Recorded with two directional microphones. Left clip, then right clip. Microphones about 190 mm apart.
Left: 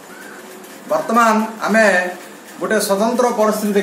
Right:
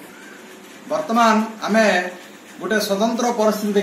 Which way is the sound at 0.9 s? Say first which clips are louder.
Left 3 dB; 20° left (ahead or behind).